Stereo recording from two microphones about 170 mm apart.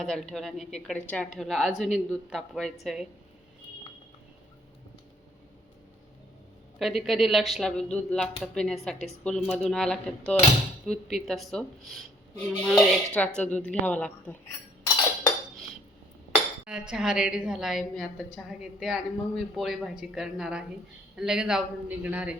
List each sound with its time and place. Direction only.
0.0 s a woman's voice: centre (ahead or behind)
6.7 s a woman's voice: centre (ahead or behind)
16.6 s a woman's voice: 5° right (ahead or behind)